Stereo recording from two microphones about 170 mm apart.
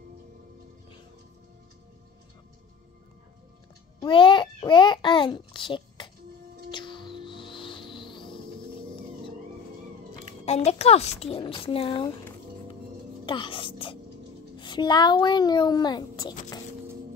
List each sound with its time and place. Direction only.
4.0 s a sound: 30° left (ahead or behind)
6.7 s music: 30° left (ahead or behind)
10.4 s a woman's voice: 40° left (ahead or behind)
13.2 s speech: 30° left (ahead or behind)